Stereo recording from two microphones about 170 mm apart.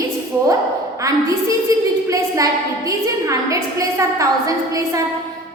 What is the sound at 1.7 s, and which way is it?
A woman's voice, 20° right (ahead or behind).